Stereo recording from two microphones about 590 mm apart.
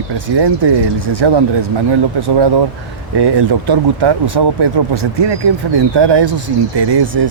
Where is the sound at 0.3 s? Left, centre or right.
Right.